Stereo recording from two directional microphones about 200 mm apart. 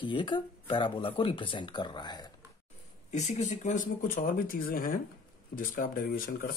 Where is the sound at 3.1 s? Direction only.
35° left (ahead or behind).